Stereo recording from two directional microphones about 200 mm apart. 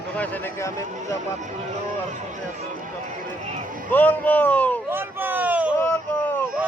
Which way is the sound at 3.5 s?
40° right (ahead or behind).